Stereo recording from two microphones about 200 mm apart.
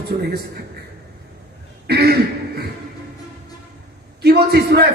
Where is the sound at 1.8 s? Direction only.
55° right (ahead or behind).